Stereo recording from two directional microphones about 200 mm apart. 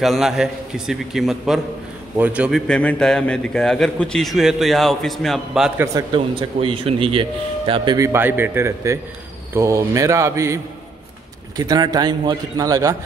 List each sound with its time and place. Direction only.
0.0 s a man's voice: centre (ahead or behind)
5.9 s speech: 25° right (ahead or behind)